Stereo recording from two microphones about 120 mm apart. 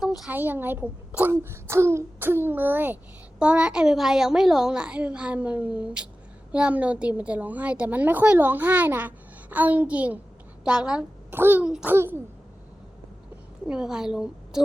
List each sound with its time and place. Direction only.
0.3 s a child's voice: 15° right (ahead or behind)
11.3 s a child's voice: 20° right (ahead or behind)
11.6 s a child's voice: 5° right (ahead or behind)
11.9 s a child's voice: 20° right (ahead or behind)
13.7 s a woman's voice: 5° right (ahead or behind)